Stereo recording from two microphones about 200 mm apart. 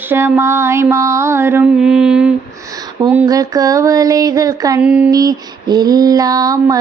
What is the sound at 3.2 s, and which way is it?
Female singing, 15° right (ahead or behind).